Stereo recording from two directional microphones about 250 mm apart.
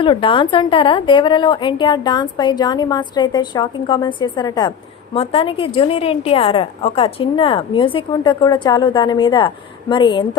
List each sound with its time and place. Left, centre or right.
0.0 s a woman's voice: centre